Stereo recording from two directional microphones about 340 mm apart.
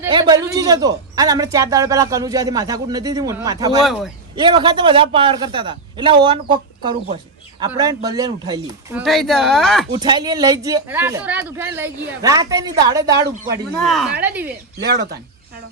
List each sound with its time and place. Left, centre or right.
0.0 s a man's voice: centre
9.9 s a man's voice: centre
13.2 s speech: right
13.7 s a man's voice: centre
14.8 s speech: right